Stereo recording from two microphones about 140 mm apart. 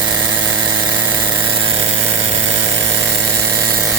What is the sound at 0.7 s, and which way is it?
Engine, 30° right (ahead or behind).